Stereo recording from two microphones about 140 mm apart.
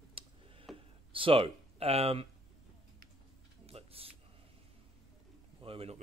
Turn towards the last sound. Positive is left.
turn(degrees=-45)  # may be behind; listen again after turning